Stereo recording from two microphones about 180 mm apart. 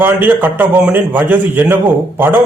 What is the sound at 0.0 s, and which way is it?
A man's voice, 10° right (ahead or behind).